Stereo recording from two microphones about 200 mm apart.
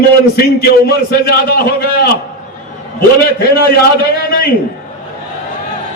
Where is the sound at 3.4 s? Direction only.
50° left (ahead or behind).